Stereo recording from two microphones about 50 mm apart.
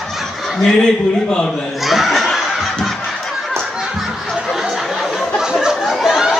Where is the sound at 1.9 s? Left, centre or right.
Centre.